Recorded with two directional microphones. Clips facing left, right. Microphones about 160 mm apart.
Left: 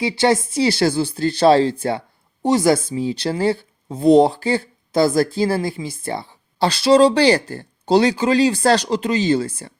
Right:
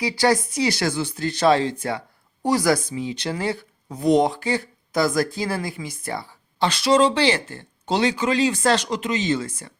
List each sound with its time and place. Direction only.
0.0 s speech: 25° left (ahead or behind)